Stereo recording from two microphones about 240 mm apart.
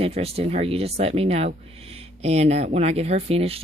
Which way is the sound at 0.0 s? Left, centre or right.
Right.